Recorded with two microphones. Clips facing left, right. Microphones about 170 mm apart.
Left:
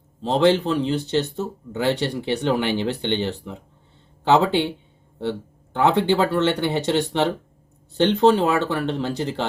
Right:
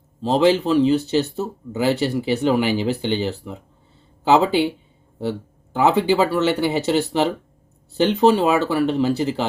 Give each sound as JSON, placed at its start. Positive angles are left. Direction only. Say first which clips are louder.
{"t": 0.2, "sound": "speech", "louder": "right 1 dB", "side_deg": -5}